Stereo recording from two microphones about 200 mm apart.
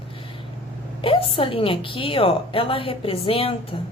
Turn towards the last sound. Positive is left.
turn(degrees=25)  # may be behind; listen again after turning